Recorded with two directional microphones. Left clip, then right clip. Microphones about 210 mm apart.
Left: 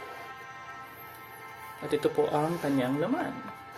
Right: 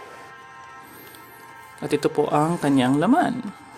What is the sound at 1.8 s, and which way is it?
Speech, 40° right (ahead or behind).